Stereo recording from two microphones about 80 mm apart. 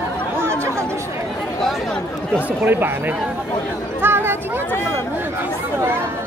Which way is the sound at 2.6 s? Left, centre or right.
Right.